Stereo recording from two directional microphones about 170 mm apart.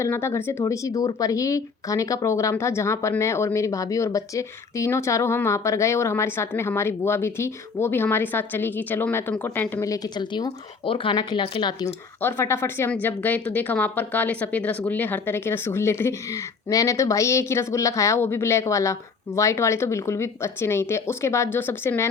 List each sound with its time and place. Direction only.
0.0 s speech: 15° left (ahead or behind); by 11.7 s 30° left (ahead or behind)
12.2 s speech: 15° left (ahead or behind)